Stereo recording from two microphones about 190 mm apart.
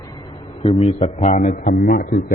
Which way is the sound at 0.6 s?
30° left (ahead or behind).